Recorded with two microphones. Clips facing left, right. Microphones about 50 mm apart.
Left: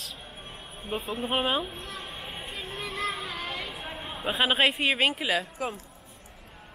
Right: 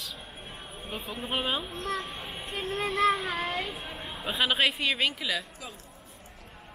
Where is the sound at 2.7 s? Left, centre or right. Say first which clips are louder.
Right 8 dB; right.